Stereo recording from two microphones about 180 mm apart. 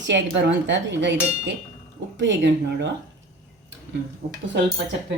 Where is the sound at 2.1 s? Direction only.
75° right (ahead or behind).